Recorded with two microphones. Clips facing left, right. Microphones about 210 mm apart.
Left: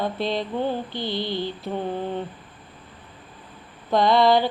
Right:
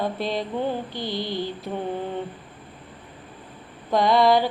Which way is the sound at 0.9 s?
25° left (ahead or behind).